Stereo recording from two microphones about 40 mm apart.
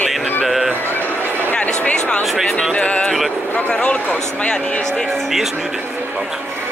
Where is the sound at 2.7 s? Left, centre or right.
Left.